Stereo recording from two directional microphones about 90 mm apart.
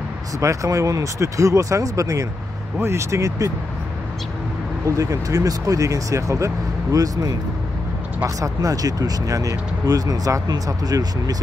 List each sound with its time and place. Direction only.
0.4 s speech: 35° right (ahead or behind)
4.8 s speech: 40° right (ahead or behind)
8.4 s speech: 40° right (ahead or behind)